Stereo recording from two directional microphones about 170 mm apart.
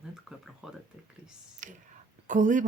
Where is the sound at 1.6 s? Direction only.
50° right (ahead or behind).